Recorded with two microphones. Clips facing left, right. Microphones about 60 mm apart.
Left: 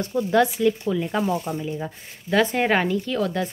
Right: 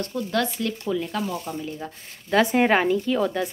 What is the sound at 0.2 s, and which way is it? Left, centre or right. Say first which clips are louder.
Speech: left 7 dB; centre.